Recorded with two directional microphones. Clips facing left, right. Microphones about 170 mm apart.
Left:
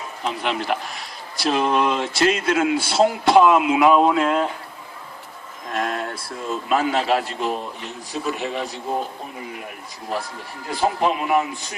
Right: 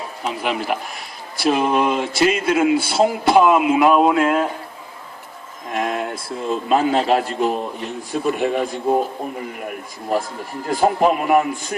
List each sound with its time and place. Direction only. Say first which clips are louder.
0.3 s speech: right 1 dB; 5° right (ahead or behind)
2.7 s a man's voice: right 3 dB; 55° right (ahead or behind)
3.0 s speech: left 1 dB; centre (ahead or behind)
5.7 s a sound: right 3 dB; 10° right (ahead or behind)
6.2 s a man's voice: right 4 dB; 30° right (ahead or behind); by 11.4 s 50° right (ahead or behind)